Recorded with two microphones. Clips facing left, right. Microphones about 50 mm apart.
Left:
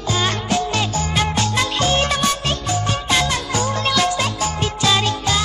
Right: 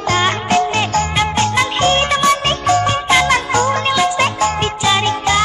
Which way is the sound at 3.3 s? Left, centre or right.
Right.